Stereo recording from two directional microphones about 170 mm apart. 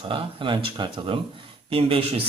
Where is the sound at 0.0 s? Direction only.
30° right (ahead or behind).